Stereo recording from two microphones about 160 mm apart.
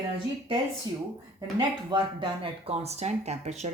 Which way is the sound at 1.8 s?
30° right (ahead or behind).